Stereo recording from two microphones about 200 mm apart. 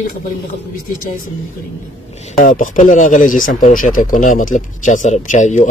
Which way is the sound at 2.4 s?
40° left (ahead or behind).